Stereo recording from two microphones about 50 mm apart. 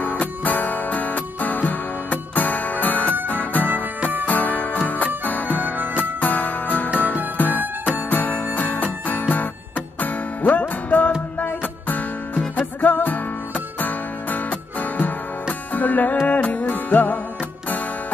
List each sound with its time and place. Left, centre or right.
0.0 s music: left